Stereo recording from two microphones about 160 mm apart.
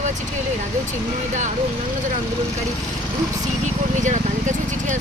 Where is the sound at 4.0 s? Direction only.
50° right (ahead or behind).